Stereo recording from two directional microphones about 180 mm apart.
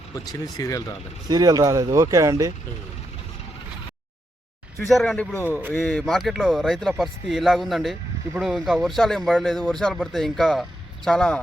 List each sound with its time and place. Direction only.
0.3 s speech: 20° left (ahead or behind)
1.3 s speech: 20° right (ahead or behind)
4.9 s speech: centre (ahead or behind)